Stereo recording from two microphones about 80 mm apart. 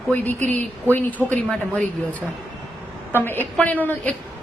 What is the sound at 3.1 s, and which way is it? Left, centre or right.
A woman's voice, left.